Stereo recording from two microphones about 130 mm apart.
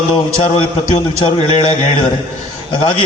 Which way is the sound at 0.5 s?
45° left (ahead or behind).